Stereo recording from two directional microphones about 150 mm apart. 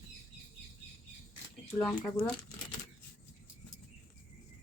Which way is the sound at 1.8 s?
5° left (ahead or behind).